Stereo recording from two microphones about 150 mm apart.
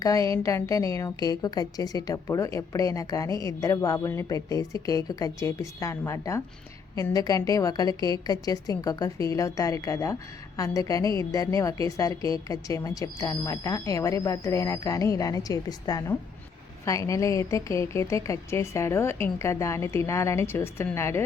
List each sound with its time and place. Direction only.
0.0 s a woman's voice: 20° left (ahead or behind)